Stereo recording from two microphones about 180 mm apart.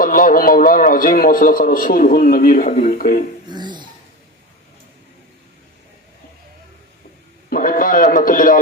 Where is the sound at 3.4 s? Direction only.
25° right (ahead or behind).